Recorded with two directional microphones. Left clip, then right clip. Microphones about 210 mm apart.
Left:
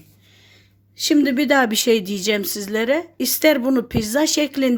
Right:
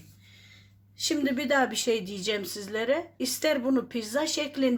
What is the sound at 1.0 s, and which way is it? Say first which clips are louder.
Speech: left 10 dB; 45° left (ahead or behind).